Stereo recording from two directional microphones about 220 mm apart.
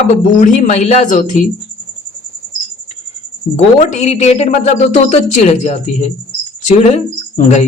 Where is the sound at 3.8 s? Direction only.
30° left (ahead or behind).